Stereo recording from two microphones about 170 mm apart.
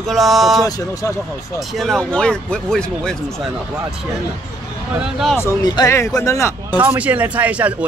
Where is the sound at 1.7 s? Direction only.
Centre (ahead or behind).